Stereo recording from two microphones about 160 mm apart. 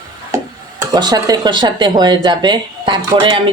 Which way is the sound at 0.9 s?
25° right (ahead or behind).